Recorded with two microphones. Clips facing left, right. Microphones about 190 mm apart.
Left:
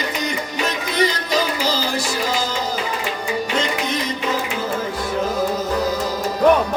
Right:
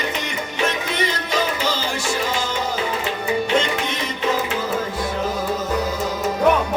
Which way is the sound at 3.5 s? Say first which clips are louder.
Right 1 dB; 35° left (ahead or behind).